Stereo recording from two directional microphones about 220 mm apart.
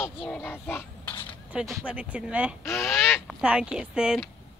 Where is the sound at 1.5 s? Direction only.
5° right (ahead or behind).